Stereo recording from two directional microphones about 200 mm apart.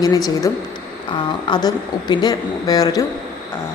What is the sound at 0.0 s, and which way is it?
A woman's voice, 20° left (ahead or behind).